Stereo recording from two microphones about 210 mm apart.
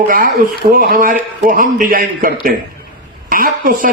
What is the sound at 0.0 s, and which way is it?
Speech, 40° right (ahead or behind).